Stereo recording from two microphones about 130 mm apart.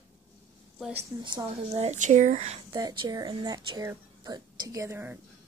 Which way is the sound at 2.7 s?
35° right (ahead or behind).